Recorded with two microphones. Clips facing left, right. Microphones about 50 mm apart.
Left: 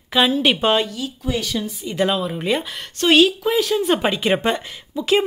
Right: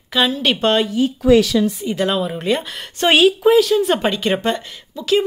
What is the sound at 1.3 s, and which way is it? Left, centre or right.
Speech, right.